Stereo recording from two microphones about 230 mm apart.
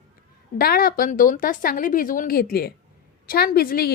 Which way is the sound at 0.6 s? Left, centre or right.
Left.